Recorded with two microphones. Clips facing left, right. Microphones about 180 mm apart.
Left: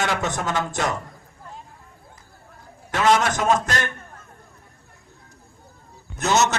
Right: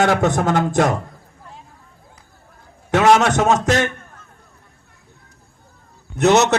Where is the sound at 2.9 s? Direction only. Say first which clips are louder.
Right 6 dB; 80° right.